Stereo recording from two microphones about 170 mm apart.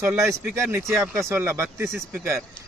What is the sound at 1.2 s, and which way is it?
Speech, 15° right (ahead or behind).